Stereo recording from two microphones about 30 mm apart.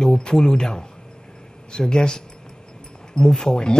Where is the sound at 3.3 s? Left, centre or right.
Centre.